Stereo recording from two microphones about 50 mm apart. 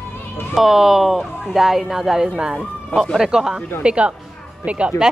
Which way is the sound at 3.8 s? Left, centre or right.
Right.